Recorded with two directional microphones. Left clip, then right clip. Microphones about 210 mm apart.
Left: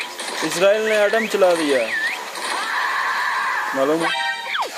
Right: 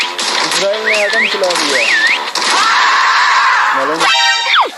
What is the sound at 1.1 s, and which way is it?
Mechanisms, 45° right (ahead or behind).